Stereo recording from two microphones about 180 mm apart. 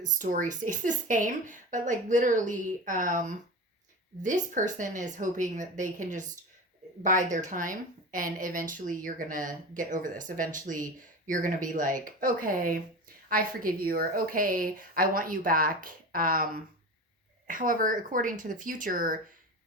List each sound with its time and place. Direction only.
0.0 s a woman's voice: 45° right (ahead or behind)